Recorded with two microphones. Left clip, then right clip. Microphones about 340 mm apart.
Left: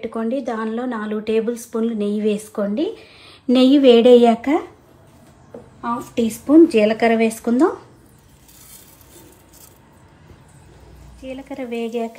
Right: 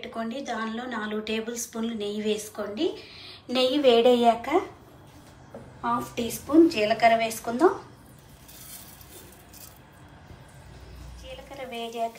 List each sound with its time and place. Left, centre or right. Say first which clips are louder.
0.0 s a woman's voice: left 10 dB; centre
5.8 s speech: left 5 dB; left
11.5 s speech: left 9 dB; left